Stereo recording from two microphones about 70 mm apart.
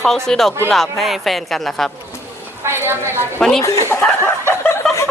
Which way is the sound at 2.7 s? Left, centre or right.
Right.